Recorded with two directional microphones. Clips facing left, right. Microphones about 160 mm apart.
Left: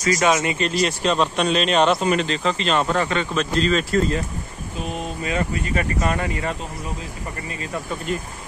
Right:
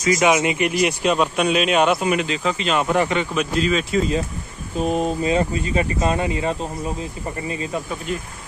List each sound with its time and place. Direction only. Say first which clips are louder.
0.0 s speech: right 2 dB; 15° right (ahead or behind)
4.7 s speech: right 8 dB; 40° right (ahead or behind)
5.2 s speech: right 4 dB; 25° right (ahead or behind)
8.1 s speech: left 1 dB; centre (ahead or behind)